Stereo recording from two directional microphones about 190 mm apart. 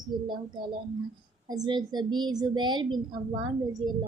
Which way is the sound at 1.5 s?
20° right (ahead or behind).